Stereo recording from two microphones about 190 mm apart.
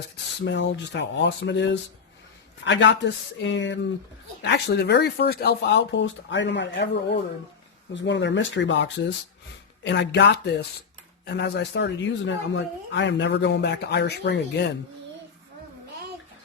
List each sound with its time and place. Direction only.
0.4 s speech: 70° left (ahead or behind)
4.4 s a man's voice: 60° left (ahead or behind)